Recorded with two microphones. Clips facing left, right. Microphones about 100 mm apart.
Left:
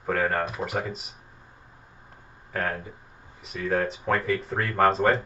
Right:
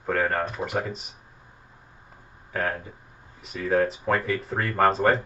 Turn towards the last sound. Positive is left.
turn(degrees=0)  # may be behind; listen again after turning